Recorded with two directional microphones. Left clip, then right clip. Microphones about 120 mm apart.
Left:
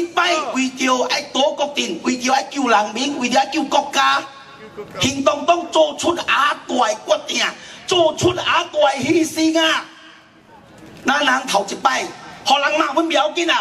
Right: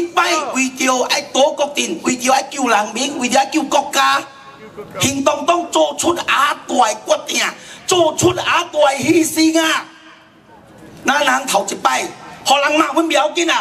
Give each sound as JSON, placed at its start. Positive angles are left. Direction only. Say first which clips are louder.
{"t": 0.1, "sound": "music", "louder": "right 2 dB", "side_deg": -30}
{"t": 0.6, "sound": "speech", "louder": "right 2 dB", "side_deg": -30}
{"t": 11.1, "sound": "speech", "louder": "right 2 dB", "side_deg": -30}